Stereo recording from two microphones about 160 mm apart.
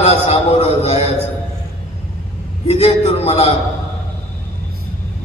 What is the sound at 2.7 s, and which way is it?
Speech, 40° left (ahead or behind).